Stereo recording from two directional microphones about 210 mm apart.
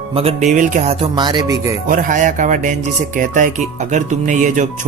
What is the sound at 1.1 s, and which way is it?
Speech, 20° right (ahead or behind).